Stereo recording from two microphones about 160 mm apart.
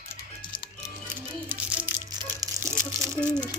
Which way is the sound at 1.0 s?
15° right (ahead or behind).